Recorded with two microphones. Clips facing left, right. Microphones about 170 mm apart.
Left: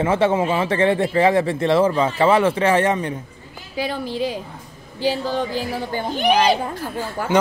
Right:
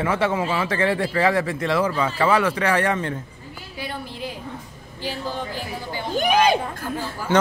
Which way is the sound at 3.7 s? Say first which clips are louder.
Left 8 dB; 90° left.